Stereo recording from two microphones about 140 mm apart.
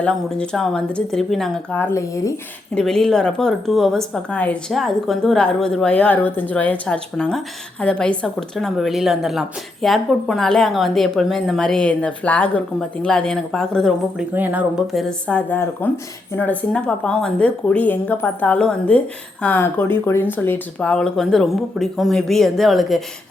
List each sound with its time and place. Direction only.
0.0 s a woman's voice: 5° left (ahead or behind)
1.8 s speech: 20° left (ahead or behind)
2.7 s a woman's voice: 5° left (ahead or behind)
14.3 s speech: 15° right (ahead or behind)
14.9 s a woman's voice: 5° left (ahead or behind)